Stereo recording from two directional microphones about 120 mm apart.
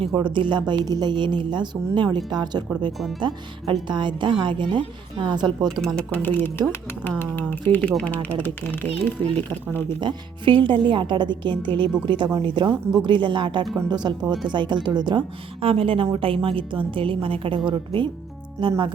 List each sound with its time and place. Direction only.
0.1 s a woman's voice: 40° right (ahead or behind)
5.6 s speech: centre (ahead or behind)
6.0 s speech: 15° left (ahead or behind)
9.2 s a woman's voice: 40° right (ahead or behind)
15.6 s a woman's voice: 50° right (ahead or behind)